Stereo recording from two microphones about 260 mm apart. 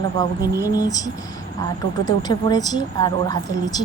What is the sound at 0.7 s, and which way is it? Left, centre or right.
Speech, centre.